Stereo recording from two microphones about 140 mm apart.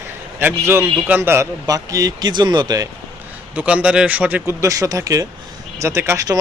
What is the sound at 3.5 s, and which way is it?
A man's voice, 10° right (ahead or behind).